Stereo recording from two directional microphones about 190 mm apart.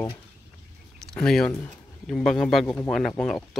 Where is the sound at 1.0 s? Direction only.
5° left (ahead or behind).